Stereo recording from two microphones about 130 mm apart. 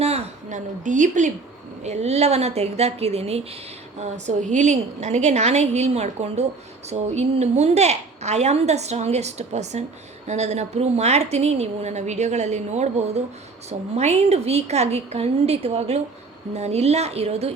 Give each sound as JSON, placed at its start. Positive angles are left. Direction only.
{"t": 0.0, "sound": "a sound", "side_deg": -55}
{"t": 0.9, "sound": "a woman's voice", "side_deg": -80}
{"t": 1.8, "sound": "a woman's voice", "side_deg": -60}
{"t": 4.0, "sound": "a woman's voice", "side_deg": -65}